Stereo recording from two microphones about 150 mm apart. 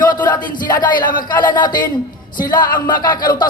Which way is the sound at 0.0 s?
30° left (ahead or behind).